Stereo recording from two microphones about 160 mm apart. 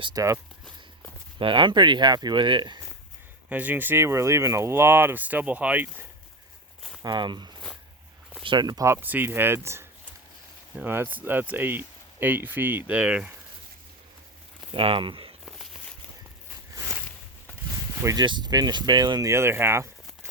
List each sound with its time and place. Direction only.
0.0 s speech: 20° right (ahead or behind)
1.4 s speech: 30° right (ahead or behind)
3.5 s speech: 10° right (ahead or behind)
7.0 s speech: 30° right (ahead or behind); by 13.3 s 5° right (ahead or behind)
14.7 s speech: 35° right (ahead or behind)
16.7 s a sound: 15° right (ahead or behind)
17.9 s speech: 20° right (ahead or behind)